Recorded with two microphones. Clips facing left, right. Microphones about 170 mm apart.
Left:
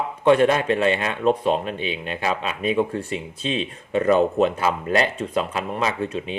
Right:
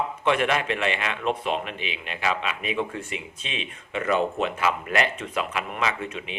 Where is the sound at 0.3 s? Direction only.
35° left (ahead or behind).